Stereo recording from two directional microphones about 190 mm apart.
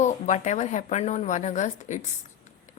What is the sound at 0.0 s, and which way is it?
A woman's voice, 40° left (ahead or behind).